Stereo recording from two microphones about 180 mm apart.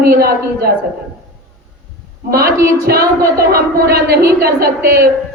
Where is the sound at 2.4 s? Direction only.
15° right (ahead or behind).